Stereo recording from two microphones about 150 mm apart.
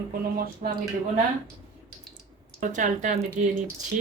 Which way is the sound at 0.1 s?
75° right (ahead or behind).